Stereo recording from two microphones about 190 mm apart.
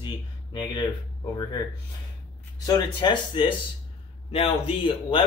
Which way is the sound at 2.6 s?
25° left (ahead or behind).